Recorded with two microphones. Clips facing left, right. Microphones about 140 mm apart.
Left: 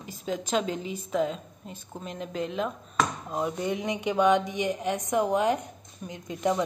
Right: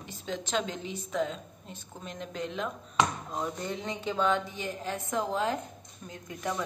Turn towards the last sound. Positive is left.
turn(degrees=20)  # may be behind; listen again after turning